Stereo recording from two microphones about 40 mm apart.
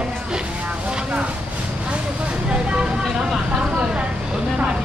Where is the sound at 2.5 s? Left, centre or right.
Right.